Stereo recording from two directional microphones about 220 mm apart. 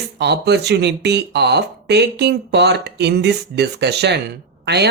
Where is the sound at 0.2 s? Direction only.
50° right (ahead or behind).